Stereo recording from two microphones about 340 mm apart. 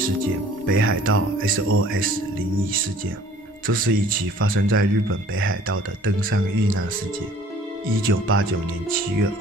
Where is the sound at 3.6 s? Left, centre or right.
Right.